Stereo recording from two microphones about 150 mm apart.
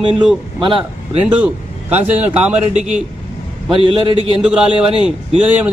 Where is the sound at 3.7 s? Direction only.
35° right (ahead or behind).